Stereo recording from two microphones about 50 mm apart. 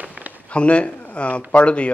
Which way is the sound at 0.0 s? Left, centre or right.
Right.